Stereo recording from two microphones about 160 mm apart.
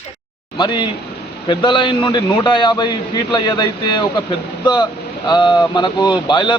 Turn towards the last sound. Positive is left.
turn(degrees=30)  # may be behind; listen again after turning